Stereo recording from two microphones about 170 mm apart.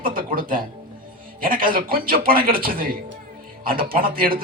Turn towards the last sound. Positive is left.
turn(degrees=-60)  # may be behind; listen again after turning